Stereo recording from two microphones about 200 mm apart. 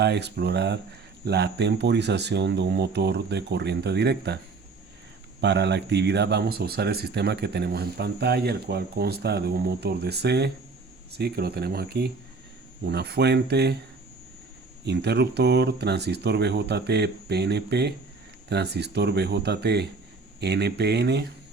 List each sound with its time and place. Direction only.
0.0 s speech: 55° right (ahead or behind)
5.4 s speech: 60° right (ahead or behind)
14.8 s speech: 55° right (ahead or behind)